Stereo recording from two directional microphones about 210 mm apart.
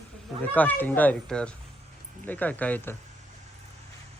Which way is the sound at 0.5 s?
10° left (ahead or behind).